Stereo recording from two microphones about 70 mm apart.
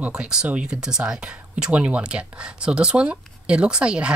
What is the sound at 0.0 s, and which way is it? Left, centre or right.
Speech, centre.